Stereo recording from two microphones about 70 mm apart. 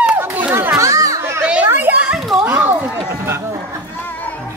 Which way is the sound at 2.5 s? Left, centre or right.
Right.